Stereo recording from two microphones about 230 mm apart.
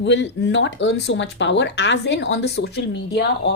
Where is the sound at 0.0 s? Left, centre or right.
Left.